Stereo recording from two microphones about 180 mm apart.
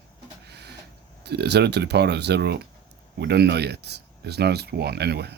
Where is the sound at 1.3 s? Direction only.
65° right (ahead or behind).